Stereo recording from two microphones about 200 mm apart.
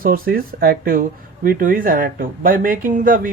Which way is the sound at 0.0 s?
45° right (ahead or behind).